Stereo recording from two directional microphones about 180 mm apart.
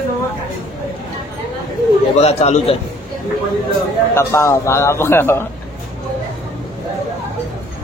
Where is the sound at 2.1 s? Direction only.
35° left (ahead or behind).